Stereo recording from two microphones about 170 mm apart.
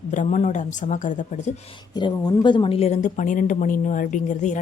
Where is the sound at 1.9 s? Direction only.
25° left (ahead or behind).